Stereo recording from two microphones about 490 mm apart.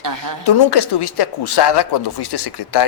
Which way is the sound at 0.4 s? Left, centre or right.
Left.